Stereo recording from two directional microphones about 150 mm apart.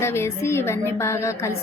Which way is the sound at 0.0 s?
15° left (ahead or behind).